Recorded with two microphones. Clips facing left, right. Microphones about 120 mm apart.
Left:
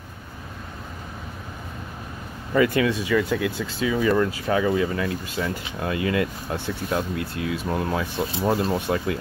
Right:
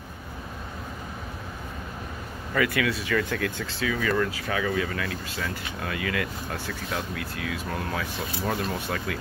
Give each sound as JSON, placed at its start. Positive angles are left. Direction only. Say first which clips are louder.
{"t": 2.5, "sound": "speech", "louder": "left 6 dB", "side_deg": 30}